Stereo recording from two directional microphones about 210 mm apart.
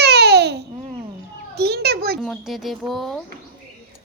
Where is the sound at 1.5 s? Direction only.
50° right (ahead or behind).